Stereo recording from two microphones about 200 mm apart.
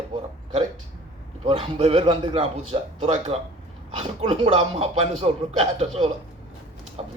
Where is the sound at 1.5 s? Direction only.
30° right (ahead or behind).